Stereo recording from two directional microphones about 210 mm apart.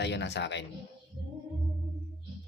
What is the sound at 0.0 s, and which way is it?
Speech, 55° left (ahead or behind).